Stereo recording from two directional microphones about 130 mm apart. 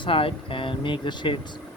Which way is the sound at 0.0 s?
45° left (ahead or behind).